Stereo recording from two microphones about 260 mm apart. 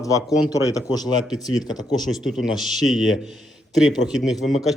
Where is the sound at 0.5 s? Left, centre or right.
Centre.